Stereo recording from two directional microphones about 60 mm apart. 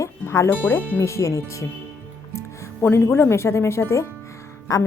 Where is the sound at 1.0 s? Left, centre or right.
Left.